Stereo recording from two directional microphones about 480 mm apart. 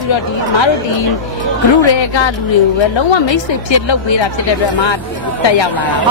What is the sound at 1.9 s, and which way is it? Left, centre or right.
Speech, left.